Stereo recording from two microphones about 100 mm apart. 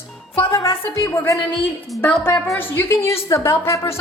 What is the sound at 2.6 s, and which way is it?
Speech, 25° left (ahead or behind).